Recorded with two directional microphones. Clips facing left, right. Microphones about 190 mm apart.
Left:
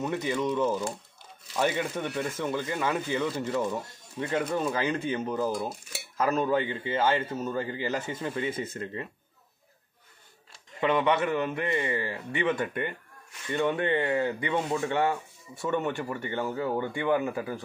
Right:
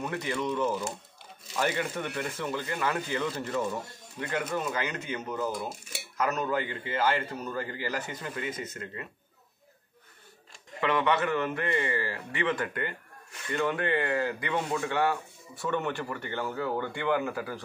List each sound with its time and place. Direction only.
0.0 s speech: 20° left (ahead or behind)
4.2 s a man's voice: 30° left (ahead or behind)
10.8 s a man's voice: 20° left (ahead or behind)